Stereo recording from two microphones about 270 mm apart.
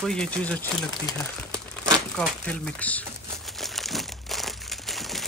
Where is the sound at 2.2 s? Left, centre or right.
Centre.